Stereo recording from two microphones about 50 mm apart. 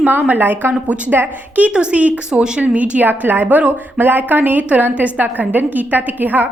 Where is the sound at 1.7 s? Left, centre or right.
Right.